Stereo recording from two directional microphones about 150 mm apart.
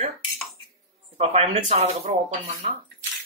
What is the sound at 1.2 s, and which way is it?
Speech, 45° right (ahead or behind).